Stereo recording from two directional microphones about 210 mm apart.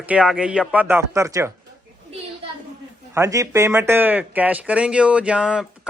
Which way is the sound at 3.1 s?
15° right (ahead or behind).